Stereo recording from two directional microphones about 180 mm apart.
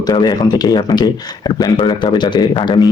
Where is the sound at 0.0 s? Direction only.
20° left (ahead or behind).